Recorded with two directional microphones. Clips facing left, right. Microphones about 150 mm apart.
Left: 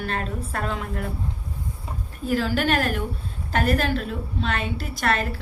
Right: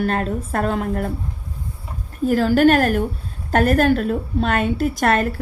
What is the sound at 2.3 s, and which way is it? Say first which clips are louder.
A woman's voice: right 8 dB; 45° right (ahead or behind).